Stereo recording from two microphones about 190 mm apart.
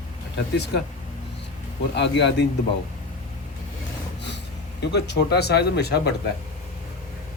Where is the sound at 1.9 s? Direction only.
65° left (ahead or behind).